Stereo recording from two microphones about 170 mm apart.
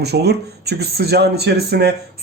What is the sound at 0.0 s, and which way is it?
Speech, 70° right (ahead or behind).